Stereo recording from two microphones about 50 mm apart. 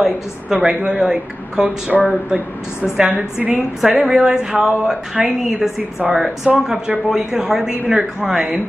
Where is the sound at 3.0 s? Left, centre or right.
Right.